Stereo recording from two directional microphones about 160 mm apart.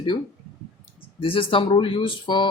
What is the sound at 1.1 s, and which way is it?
Speech, 35° left (ahead or behind).